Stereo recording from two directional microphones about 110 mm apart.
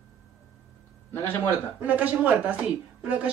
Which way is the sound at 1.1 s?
20° left (ahead or behind).